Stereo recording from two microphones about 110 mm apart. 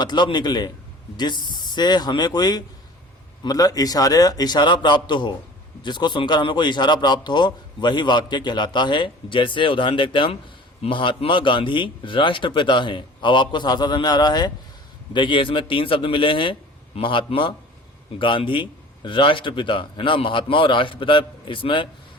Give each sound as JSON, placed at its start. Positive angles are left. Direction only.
{"t": 0.0, "sound": "a man's voice", "side_deg": 40}